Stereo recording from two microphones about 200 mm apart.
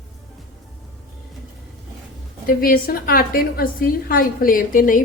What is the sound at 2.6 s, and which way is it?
A woman's voice, 45° left (ahead or behind).